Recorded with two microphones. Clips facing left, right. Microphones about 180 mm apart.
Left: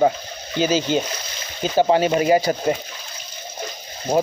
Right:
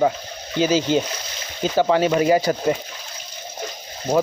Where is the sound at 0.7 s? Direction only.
15° left (ahead or behind).